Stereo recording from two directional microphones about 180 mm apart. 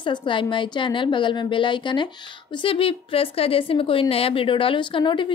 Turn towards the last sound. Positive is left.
turn(degrees=25)  # may be behind; listen again after turning